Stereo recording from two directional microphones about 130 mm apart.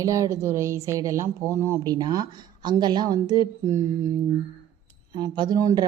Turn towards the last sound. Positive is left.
turn(degrees=-30)  # may be behind; listen again after turning